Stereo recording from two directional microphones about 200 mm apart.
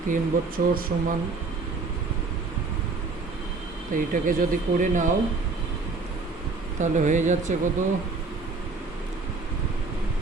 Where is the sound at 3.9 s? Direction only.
45° right (ahead or behind).